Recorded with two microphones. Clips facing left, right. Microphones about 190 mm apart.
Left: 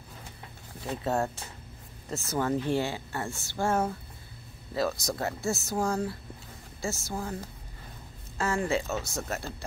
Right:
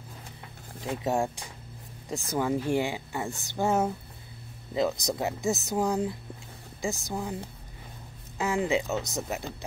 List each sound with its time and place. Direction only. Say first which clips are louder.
0.8 s speech: right 1 dB; 15° right (ahead or behind)
8.4 s speech: right 2 dB; 15° right (ahead or behind)